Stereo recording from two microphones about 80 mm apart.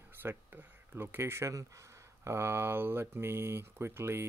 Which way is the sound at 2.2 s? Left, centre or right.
Right.